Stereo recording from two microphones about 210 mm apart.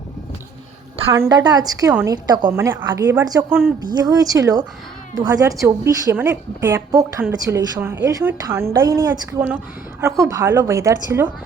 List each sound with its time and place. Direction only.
1.1 s a woman's voice: 15° right (ahead or behind)
1.9 s a woman's voice: 10° right (ahead or behind)
2.1 s a woman's voice: 20° right (ahead or behind)